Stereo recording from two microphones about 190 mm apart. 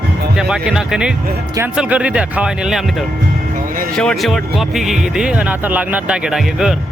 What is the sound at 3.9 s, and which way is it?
Speech, centre (ahead or behind).